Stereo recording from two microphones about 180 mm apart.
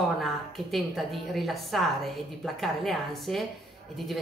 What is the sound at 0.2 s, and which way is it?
A woman's voice, centre (ahead or behind).